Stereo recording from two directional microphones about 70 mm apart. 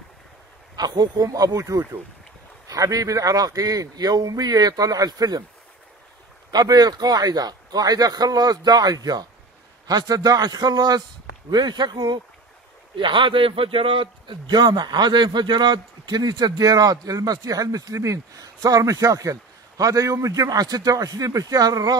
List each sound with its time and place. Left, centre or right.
0.7 s a man's voice: right
1.2 s a man's voice: right
6.5 s a man's voice: right
11.5 s speech: right
14.4 s a man's voice: right